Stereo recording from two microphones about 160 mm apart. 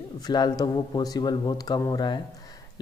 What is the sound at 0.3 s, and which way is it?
Speech, 25° left (ahead or behind).